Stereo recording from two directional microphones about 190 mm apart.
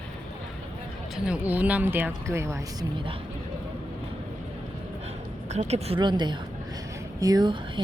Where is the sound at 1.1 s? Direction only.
5° right (ahead or behind).